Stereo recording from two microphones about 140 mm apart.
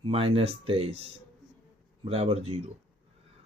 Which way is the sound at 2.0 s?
45° right (ahead or behind).